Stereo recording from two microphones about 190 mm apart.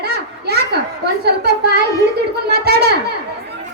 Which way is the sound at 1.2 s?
60° right (ahead or behind).